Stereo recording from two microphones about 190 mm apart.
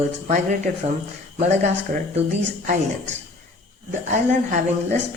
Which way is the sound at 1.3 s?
35° right (ahead or behind).